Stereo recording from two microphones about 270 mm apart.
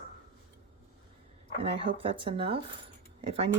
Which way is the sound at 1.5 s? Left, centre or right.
Right.